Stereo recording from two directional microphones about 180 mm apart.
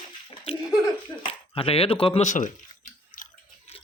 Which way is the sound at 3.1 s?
50° left (ahead or behind).